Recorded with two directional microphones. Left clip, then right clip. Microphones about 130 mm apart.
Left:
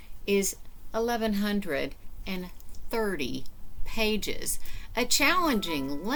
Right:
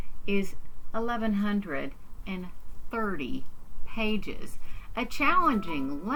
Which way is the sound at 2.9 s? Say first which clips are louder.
Left 2 dB; 45° left (ahead or behind).